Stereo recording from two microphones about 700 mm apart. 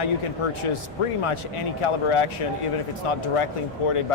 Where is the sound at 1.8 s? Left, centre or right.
Left.